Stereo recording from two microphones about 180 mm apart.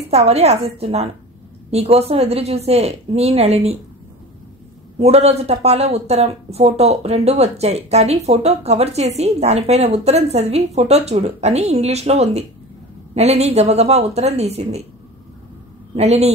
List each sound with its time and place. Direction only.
0.1 s speech: 35° right (ahead or behind)
4.9 s speech: 35° right (ahead or behind)
16.0 s speech: 35° right (ahead or behind)